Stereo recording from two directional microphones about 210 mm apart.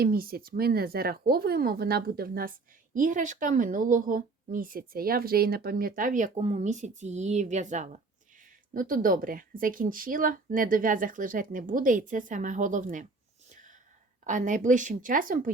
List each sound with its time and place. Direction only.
0.0 s speech: 45° right (ahead or behind)
13.5 s whispering: 35° right (ahead or behind)
14.3 s speech: 35° right (ahead or behind)